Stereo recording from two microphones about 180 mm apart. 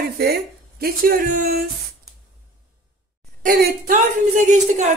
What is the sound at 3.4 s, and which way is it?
Speech, 50° right (ahead or behind).